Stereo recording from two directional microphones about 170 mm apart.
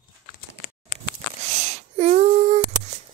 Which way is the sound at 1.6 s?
40° right (ahead or behind).